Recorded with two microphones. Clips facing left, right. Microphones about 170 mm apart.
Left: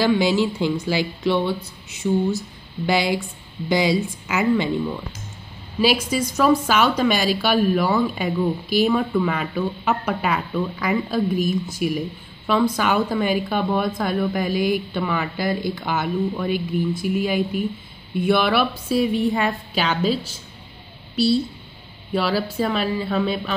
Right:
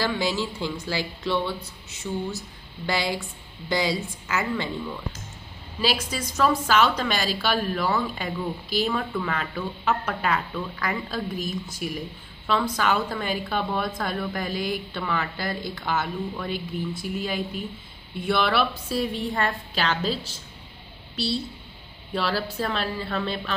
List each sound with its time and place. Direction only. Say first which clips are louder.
0.0 s a woman's voice: left 8 dB; 15° left (ahead or behind)
22.1 s a woman's voice: left 5 dB; 5° left (ahead or behind)